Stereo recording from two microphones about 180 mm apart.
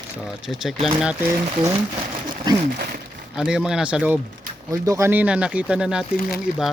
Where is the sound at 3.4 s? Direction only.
5° right (ahead or behind).